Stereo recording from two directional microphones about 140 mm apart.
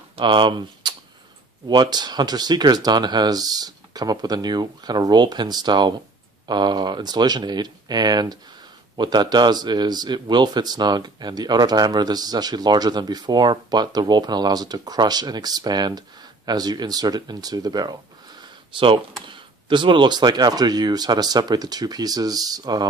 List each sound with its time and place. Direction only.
0.1 s speech: 35° right (ahead or behind)